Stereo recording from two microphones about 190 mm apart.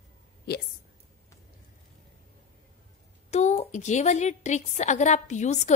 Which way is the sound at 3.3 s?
35° left (ahead or behind).